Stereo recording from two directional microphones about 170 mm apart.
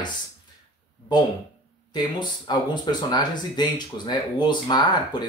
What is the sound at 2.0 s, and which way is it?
Speech, 25° left (ahead or behind).